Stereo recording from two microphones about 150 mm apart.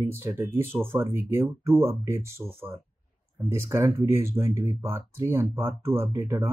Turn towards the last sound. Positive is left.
turn(degrees=-15)  # may be behind; listen again after turning